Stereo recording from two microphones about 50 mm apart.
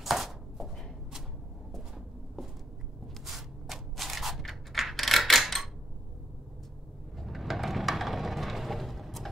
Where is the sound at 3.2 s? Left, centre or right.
Centre.